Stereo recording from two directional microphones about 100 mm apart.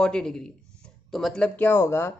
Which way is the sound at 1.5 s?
20° left (ahead or behind).